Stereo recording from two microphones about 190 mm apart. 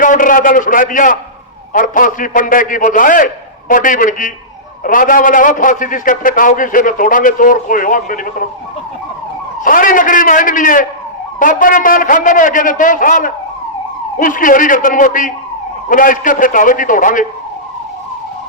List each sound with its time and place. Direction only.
0.0 s a man's voice: 45° left (ahead or behind)
9.6 s a man's voice: 45° left (ahead or behind)